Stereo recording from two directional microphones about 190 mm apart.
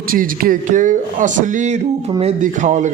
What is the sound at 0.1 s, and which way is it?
Speech, 50° right (ahead or behind).